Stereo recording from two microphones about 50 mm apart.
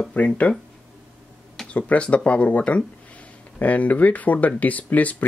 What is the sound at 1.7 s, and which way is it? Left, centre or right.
Speech, left.